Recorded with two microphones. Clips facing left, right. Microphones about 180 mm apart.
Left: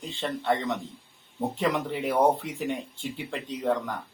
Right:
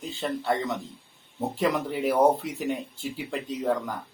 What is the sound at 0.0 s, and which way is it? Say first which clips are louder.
Speech: right 1 dB; 10° right (ahead or behind).